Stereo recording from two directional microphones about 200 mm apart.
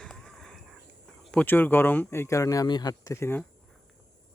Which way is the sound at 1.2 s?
5° left (ahead or behind).